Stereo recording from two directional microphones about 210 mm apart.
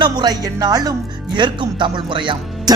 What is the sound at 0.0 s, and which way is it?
Speech, 20° right (ahead or behind).